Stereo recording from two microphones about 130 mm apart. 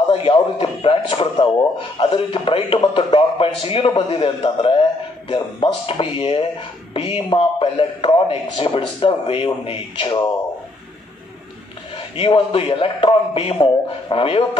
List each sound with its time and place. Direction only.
0.1 s a man's voice: 45° left (ahead or behind)
12.2 s a man's voice: 45° left (ahead or behind)